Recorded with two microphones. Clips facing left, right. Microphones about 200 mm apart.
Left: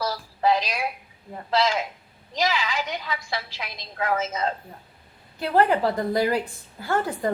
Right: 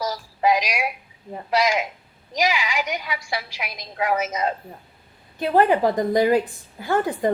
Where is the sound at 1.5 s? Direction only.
15° right (ahead or behind).